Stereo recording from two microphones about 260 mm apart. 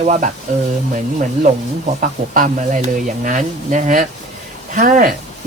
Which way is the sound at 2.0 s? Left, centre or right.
Right.